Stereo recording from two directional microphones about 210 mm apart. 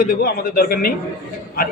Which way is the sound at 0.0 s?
45° left (ahead or behind).